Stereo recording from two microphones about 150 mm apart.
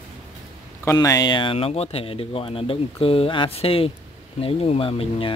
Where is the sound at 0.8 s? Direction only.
20° left (ahead or behind).